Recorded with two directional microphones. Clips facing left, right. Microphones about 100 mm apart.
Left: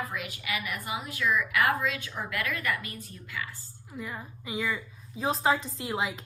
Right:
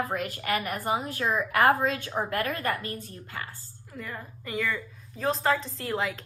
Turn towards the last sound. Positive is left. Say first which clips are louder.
# right 1 dB
turn(degrees=5)  # may be behind; listen again after turning